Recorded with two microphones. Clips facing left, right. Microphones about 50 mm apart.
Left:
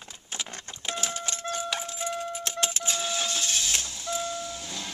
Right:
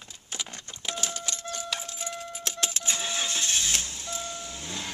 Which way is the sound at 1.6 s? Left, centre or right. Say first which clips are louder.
Left 4 dB; centre.